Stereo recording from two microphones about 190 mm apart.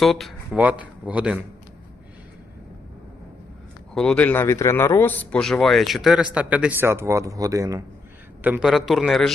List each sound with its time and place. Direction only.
0.0 s a man's voice: centre (ahead or behind)
3.9 s a man's voice: 5° left (ahead or behind)